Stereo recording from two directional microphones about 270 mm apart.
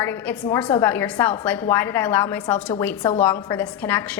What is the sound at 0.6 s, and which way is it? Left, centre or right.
Speech, centre.